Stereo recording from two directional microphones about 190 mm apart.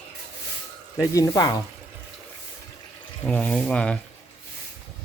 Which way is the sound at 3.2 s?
10° left (ahead or behind).